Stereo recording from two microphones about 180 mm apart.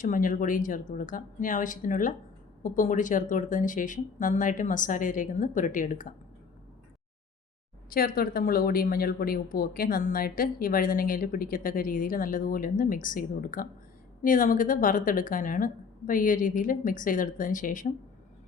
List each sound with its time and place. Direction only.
0.0 s speech: 45° left (ahead or behind)
7.9 s speech: 55° left (ahead or behind)